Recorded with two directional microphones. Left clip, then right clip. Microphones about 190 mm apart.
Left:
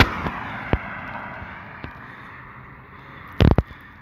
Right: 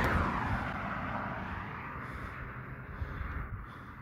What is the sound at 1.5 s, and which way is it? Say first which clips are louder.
Vehicle: left 4 dB; 25° left (ahead or behind).